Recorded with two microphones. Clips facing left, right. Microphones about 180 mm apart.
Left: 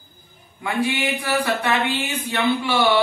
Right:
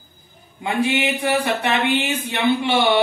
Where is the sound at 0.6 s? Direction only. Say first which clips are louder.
Right 2 dB; 20° right (ahead or behind).